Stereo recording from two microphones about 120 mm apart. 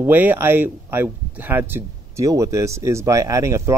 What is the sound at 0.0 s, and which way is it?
Speech, 15° right (ahead or behind).